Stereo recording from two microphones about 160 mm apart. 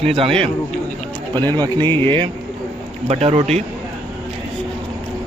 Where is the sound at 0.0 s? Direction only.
35° right (ahead or behind).